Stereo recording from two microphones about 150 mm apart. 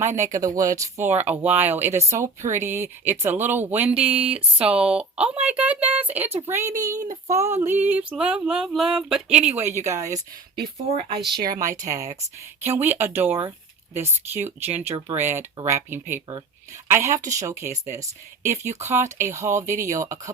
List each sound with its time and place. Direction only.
0.4 s speech: 20° right (ahead or behind); by 9.5 s 5° right (ahead or behind)
9.6 s speech: 15° right (ahead or behind)
10.8 s speech: 40° right (ahead or behind)
11.3 s speech: 75° right (ahead or behind)
11.6 s speech: 20° right (ahead or behind)